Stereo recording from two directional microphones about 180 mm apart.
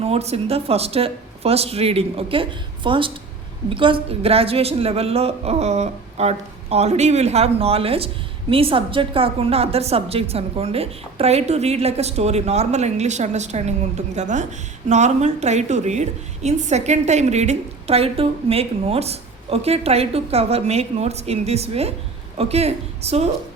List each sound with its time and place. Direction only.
0.0 s a woman's voice: 35° right (ahead or behind)